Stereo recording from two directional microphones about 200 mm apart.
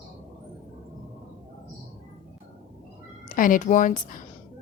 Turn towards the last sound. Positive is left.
turn(degrees=40)  # may be behind; listen again after turning